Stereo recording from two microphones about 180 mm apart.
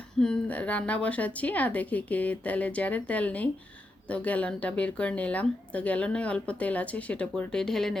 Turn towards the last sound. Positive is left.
turn(degrees=0)  # may be behind; listen again after turning